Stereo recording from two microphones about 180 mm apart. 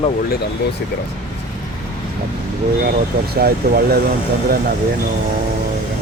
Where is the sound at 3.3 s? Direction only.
60° right (ahead or behind).